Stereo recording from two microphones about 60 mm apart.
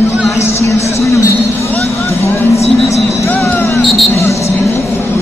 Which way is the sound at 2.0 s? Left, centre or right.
Left.